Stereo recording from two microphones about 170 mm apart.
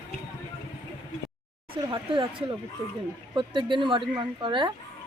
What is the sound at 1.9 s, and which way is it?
Speech, 30° right (ahead or behind).